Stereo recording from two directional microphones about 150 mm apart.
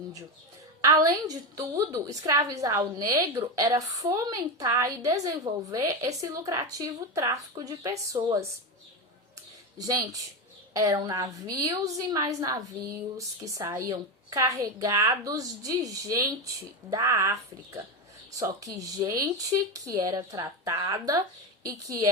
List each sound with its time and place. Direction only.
0.8 s a woman's voice: 25° right (ahead or behind)
9.7 s a woman's voice: 25° right (ahead or behind)